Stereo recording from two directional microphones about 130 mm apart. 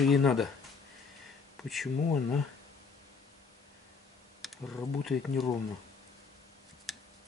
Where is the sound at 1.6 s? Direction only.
Centre (ahead or behind).